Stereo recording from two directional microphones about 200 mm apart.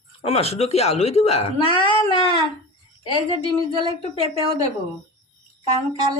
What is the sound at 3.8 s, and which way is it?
Speech, 30° right (ahead or behind).